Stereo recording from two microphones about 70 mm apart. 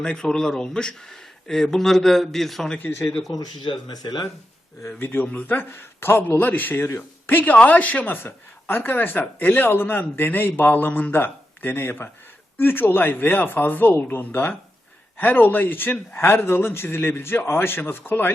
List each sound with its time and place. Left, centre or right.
0.0 s a man's voice: centre
3.3 s speech: left
4.9 s a man's voice: left